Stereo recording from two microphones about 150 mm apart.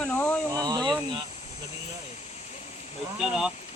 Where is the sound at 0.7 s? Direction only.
25° right (ahead or behind).